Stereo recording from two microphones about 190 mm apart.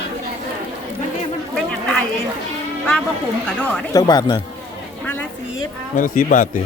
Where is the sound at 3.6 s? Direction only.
20° left (ahead or behind).